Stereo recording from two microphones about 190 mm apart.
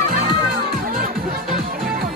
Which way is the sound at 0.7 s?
50° right (ahead or behind).